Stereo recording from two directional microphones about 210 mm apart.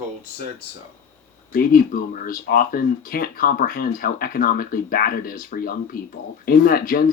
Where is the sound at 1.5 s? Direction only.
45° left (ahead or behind).